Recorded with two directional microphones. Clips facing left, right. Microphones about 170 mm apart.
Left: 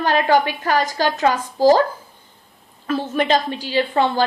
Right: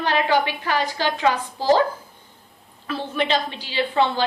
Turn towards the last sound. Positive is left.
turn(degrees=45)  # may be behind; listen again after turning